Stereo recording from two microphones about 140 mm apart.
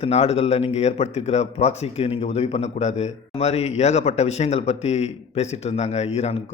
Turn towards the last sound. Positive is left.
turn(degrees=45)  # may be behind; listen again after turning